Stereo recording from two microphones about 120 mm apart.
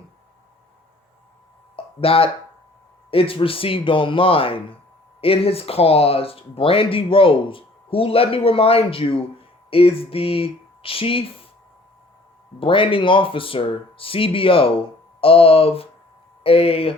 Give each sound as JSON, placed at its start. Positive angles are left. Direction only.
{"t": 1.7, "sound": "a sound", "side_deg": 50}
{"t": 3.1, "sound": "speech", "side_deg": 50}
{"t": 12.5, "sound": "speech", "side_deg": 45}